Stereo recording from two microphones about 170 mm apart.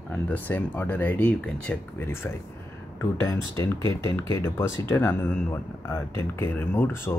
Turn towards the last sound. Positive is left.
turn(degrees=15)  # may be behind; listen again after turning